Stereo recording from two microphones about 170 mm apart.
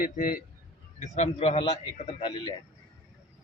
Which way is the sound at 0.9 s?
45° left (ahead or behind).